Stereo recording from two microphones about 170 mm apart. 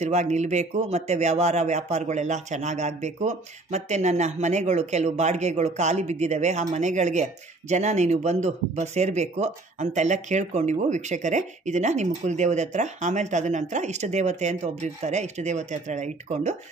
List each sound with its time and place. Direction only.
0.0 s speech: 40° right (ahead or behind)